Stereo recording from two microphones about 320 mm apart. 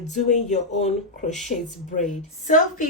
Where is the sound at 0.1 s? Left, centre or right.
Left.